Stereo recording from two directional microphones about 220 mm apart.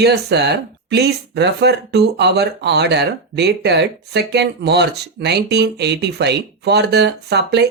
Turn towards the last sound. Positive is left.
turn(degrees=-50)  # may be behind; listen again after turning